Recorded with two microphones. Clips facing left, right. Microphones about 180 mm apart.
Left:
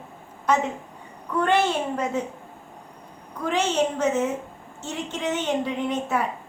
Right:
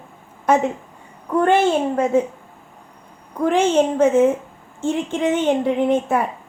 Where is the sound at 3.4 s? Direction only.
50° right (ahead or behind).